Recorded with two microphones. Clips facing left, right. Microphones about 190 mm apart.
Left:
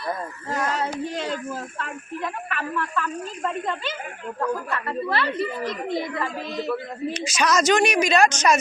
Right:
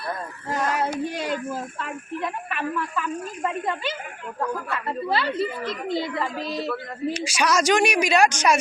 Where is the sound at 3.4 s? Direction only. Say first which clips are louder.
Even; 10° right (ahead or behind).